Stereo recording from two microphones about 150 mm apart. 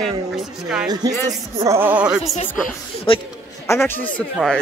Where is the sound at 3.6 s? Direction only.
15° left (ahead or behind).